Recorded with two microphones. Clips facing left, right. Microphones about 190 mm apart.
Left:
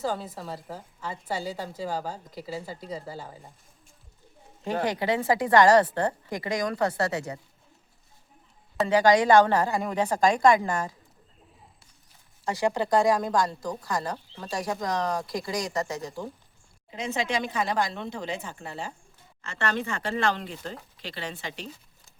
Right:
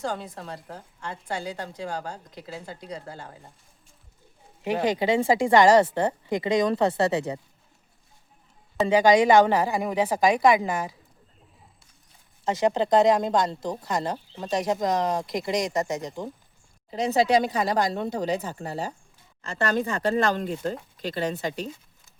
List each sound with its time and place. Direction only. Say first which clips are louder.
0.0 s a woman's voice: left 1 dB; 5° left (ahead or behind)
4.6 s speech: right 3 dB; 15° right (ahead or behind)
9.0 s a woman's voice: right 1 dB; 15° right (ahead or behind)
12.5 s speech: right 3 dB; 20° right (ahead or behind)
16.9 s speech: right 8 dB; 35° right (ahead or behind)